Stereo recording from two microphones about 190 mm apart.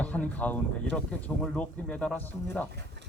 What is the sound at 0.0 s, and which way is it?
Speech, 10° left (ahead or behind).